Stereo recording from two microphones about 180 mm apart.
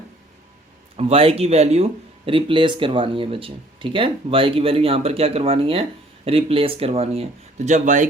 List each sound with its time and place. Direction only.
0.9 s speech: 30° right (ahead or behind)